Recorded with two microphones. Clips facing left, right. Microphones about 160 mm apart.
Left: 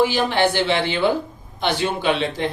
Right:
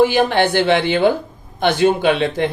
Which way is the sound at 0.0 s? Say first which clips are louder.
Right 4 dB; 55° right (ahead or behind).